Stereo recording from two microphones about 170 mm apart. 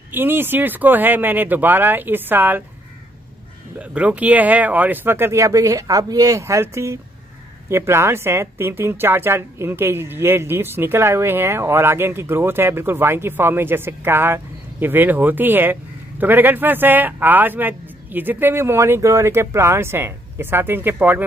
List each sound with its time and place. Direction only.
0.1 s speech: 10° right (ahead or behind)
3.8 s speech: 5° right (ahead or behind)